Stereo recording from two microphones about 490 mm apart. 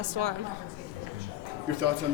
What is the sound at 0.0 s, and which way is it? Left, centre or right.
Speech, right.